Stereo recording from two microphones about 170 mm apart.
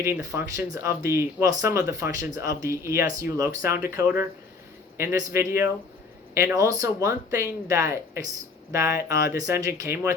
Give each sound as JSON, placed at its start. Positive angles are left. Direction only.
{"t": 0.0, "sound": "speech", "side_deg": -15}